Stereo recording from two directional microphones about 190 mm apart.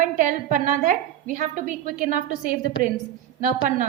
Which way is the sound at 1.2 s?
45° right (ahead or behind).